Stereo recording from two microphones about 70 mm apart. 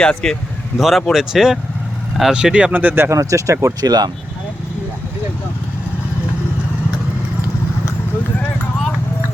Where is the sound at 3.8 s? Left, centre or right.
Right.